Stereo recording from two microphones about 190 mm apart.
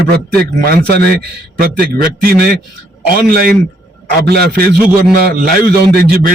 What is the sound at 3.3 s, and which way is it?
A man's voice, 50° right (ahead or behind).